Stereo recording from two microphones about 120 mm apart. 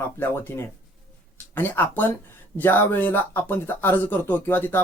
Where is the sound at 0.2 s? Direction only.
20° left (ahead or behind).